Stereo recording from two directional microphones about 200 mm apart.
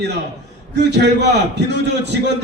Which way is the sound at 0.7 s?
60° right (ahead or behind).